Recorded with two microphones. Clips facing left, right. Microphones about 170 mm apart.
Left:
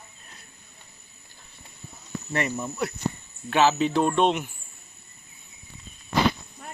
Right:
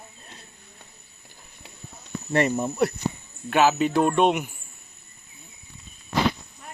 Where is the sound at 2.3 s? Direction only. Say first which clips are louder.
Right 6 dB; 30° right (ahead or behind).